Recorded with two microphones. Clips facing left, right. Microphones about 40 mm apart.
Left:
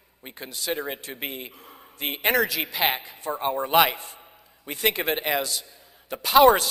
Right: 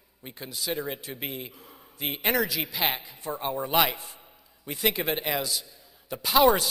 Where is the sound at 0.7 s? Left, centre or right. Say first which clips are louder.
Left 2 dB; left.